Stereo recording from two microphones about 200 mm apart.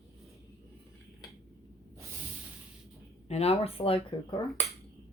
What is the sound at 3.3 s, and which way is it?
Speech, 30° left (ahead or behind).